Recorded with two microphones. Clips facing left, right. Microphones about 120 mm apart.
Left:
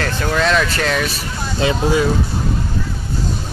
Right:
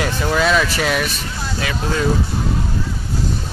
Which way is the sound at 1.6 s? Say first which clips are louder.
Left 9 dB; 25° left (ahead or behind).